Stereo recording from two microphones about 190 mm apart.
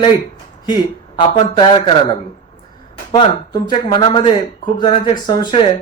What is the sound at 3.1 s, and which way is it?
A man's voice, 25° left (ahead or behind).